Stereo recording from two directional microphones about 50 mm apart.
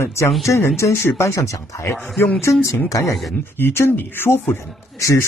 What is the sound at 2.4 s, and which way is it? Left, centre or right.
Speech, left.